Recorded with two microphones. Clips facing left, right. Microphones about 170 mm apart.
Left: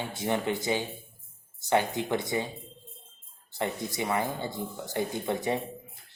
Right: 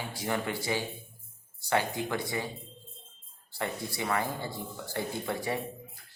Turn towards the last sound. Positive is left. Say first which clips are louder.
# left 3 dB
turn(degrees=20)  # may be behind; listen again after turning